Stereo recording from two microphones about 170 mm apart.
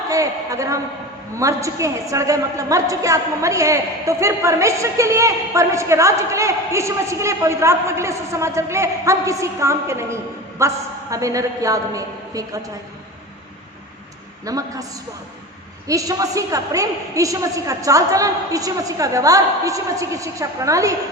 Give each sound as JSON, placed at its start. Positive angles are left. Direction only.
{"t": 0.1, "sound": "a sound", "side_deg": -20}
{"t": 1.4, "sound": "a woman's voice", "side_deg": -20}
{"t": 14.4, "sound": "a woman's voice", "side_deg": -20}
{"t": 15.9, "sound": "a woman's voice", "side_deg": -20}